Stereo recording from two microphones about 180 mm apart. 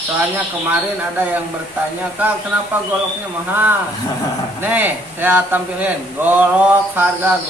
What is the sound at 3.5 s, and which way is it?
Speech, 10° right (ahead or behind).